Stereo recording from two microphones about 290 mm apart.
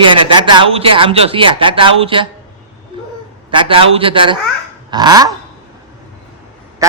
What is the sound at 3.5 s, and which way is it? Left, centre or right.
A man's voice, centre.